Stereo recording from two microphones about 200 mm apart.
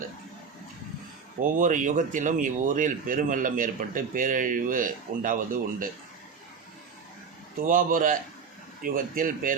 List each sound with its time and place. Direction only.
1.4 s speech: 40° right (ahead or behind)
7.6 s speech: 45° right (ahead or behind)